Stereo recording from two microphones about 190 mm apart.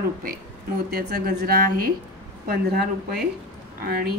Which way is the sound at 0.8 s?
55° right (ahead or behind).